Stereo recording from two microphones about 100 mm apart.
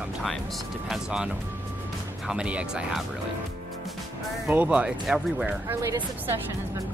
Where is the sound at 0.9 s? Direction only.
5° right (ahead or behind).